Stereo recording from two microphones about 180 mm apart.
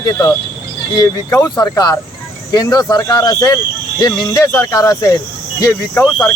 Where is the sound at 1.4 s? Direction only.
20° left (ahead or behind).